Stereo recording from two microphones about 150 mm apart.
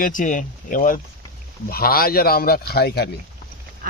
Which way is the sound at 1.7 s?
85° left.